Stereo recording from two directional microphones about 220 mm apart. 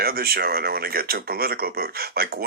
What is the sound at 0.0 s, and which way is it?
Speech, 45° right (ahead or behind).